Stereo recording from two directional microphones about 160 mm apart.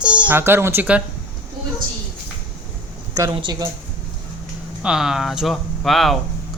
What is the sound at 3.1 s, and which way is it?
Speech, 25° right (ahead or behind).